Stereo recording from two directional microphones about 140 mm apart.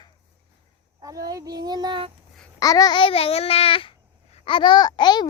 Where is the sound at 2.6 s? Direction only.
25° left (ahead or behind).